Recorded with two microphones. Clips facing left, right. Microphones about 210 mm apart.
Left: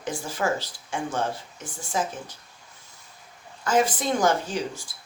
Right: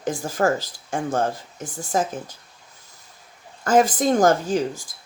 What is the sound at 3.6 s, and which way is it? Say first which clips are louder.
Speech: right 5 dB; 45° right (ahead or behind).